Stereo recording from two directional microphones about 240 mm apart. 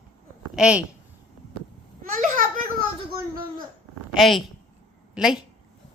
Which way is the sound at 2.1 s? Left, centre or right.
Right.